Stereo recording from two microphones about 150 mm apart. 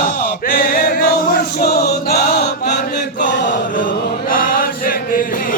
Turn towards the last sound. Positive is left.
turn(degrees=70)  # may be behind; listen again after turning